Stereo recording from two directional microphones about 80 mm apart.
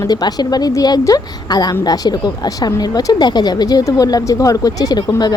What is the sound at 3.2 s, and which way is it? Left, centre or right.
A woman's voice, left.